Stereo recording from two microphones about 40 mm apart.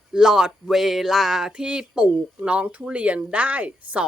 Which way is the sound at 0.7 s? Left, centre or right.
Centre.